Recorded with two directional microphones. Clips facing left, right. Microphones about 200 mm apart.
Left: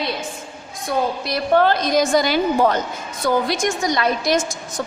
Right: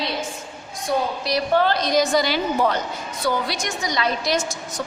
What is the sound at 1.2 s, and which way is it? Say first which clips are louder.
A woman's voice: left 4 dB; 50° left (ahead or behind).